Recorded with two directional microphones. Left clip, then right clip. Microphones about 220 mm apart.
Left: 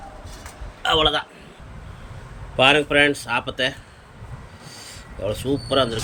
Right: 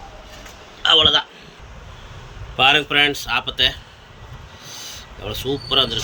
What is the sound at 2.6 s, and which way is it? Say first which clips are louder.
Speech: right 1 dB; 10° left (ahead or behind).